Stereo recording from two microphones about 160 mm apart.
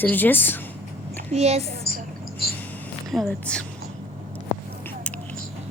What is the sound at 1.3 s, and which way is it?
Speech, 40° right (ahead or behind).